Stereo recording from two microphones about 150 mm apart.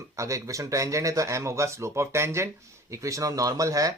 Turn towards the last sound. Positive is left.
turn(degrees=-20)  # may be behind; listen again after turning